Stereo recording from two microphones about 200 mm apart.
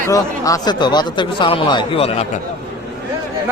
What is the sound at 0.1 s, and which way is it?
Speech, 15° left (ahead or behind).